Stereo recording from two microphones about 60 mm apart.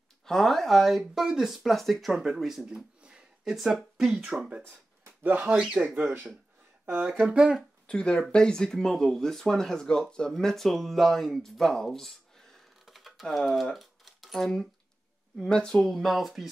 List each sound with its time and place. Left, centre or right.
0.2 s speech: centre
3.0 s a sound: centre
3.4 s speech: centre
4.3 s speech: centre
4.6 s a sound: right
5.5 s speech: centre
5.9 s speech: right
7.2 s speech: centre
7.8 s speech: centre